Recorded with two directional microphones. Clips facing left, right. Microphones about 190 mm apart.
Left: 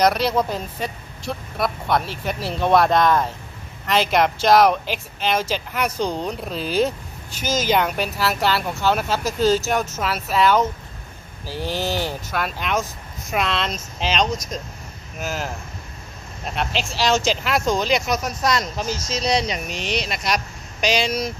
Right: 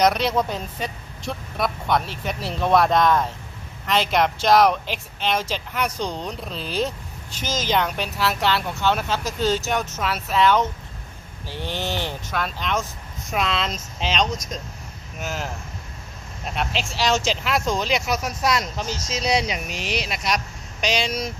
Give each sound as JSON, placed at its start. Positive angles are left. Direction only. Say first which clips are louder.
{"t": 0.0, "sound": "speech", "louder": "left 1 dB", "side_deg": 0}
{"t": 11.6, "sound": "speech", "louder": "left 4 dB", "side_deg": 35}
{"t": 11.9, "sound": "speech", "louder": "left 3 dB", "side_deg": 5}
{"t": 16.7, "sound": "speech", "louder": "left 2 dB", "side_deg": 0}